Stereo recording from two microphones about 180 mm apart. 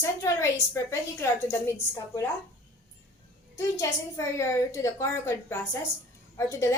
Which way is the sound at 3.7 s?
15° left (ahead or behind).